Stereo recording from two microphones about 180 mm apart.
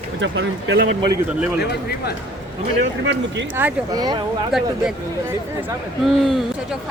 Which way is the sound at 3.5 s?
10° right (ahead or behind).